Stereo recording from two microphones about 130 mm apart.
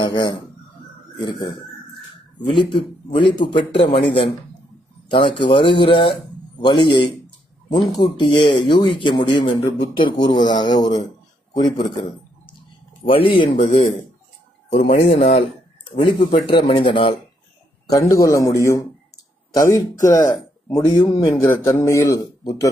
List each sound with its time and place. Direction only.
0.0 s speech: 35° left (ahead or behind)
2.5 s speech: 40° left (ahead or behind)
5.1 s speech: 40° left (ahead or behind)
13.6 s speech: 55° left (ahead or behind)
16.0 s speech: 45° left (ahead or behind)
17.9 s a man's voice: 25° left (ahead or behind)